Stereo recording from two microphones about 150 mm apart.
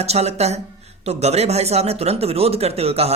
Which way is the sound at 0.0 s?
45° right (ahead or behind).